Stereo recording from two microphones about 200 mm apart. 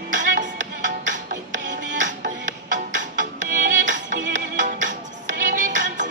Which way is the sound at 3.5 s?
40° right (ahead or behind).